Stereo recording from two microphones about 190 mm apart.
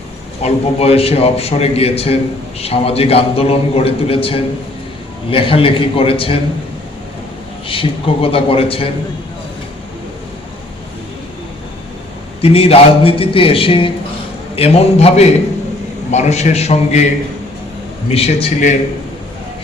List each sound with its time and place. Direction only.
0.4 s a man's voice: 30° left (ahead or behind)
7.7 s a man's voice: 30° left (ahead or behind)
12.4 s a man's voice: 30° left (ahead or behind)
18.1 s a man's voice: 30° left (ahead or behind)